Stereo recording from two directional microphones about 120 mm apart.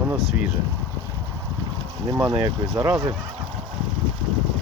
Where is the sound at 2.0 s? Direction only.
30° right (ahead or behind).